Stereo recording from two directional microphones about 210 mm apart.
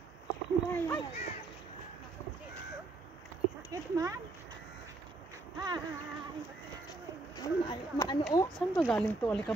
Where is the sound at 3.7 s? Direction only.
15° right (ahead or behind).